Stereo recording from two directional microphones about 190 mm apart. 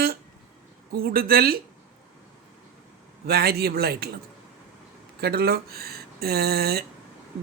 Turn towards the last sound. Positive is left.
turn(degrees=-55)  # may be behind; listen again after turning